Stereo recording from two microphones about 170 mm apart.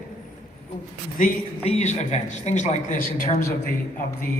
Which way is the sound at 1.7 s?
40° left (ahead or behind).